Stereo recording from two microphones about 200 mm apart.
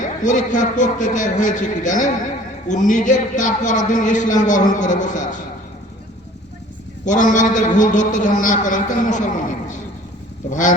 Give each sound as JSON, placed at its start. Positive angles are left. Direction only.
{"t": 0.0, "sound": "a man's voice", "side_deg": 40}
{"t": 7.0, "sound": "a man's voice", "side_deg": 40}